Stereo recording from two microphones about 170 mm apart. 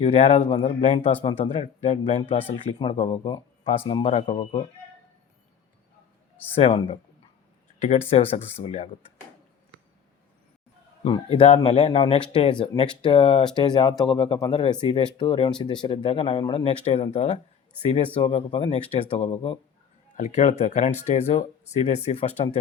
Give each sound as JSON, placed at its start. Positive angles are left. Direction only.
{"t": 0.0, "sound": "speech", "side_deg": 35}
{"t": 1.2, "sound": "speech", "side_deg": 30}
{"t": 6.5, "sound": "speech", "side_deg": 35}
{"t": 7.8, "sound": "speech", "side_deg": 45}
{"t": 11.0, "sound": "speech", "side_deg": 35}